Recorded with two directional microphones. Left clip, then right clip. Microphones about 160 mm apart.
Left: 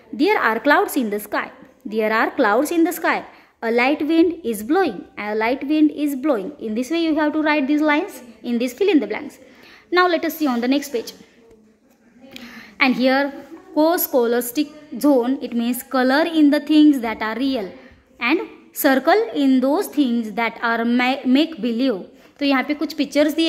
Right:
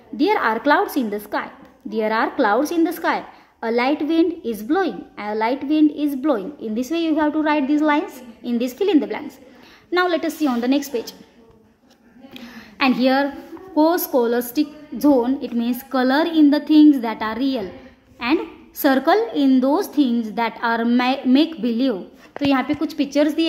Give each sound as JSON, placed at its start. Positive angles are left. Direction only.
{"t": 0.2, "sound": "a woman's voice", "side_deg": 20}
{"t": 12.4, "sound": "a sound", "side_deg": 15}
{"t": 13.7, "sound": "a woman's voice", "side_deg": 10}